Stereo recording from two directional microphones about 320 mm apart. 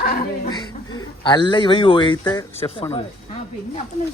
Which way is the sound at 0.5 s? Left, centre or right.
Centre.